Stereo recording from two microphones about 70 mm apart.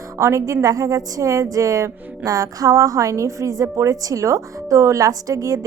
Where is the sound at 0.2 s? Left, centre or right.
Right.